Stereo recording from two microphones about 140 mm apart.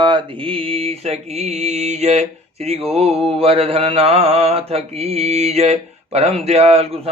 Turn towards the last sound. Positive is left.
turn(degrees=-45)  # may be behind; listen again after turning